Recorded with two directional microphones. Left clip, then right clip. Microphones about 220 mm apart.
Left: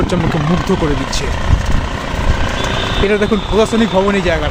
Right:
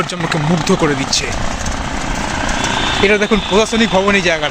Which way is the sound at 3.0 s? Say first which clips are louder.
Right 1 dB; 5° right (ahead or behind).